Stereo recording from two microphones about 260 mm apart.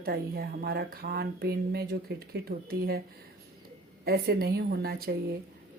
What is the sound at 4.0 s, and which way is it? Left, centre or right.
Speech, right.